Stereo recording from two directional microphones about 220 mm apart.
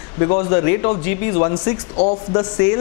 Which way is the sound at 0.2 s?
25° left (ahead or behind).